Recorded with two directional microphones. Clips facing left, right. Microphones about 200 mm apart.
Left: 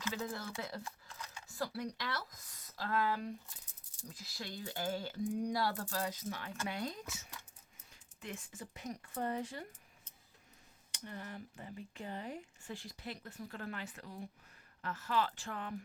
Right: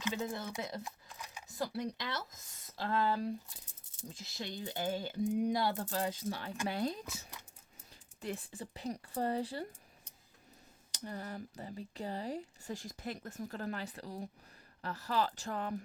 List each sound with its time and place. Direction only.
0.0 s speech: 20° right (ahead or behind)
8.2 s speech: 35° right (ahead or behind)
10.9 s speech: 40° right (ahead or behind)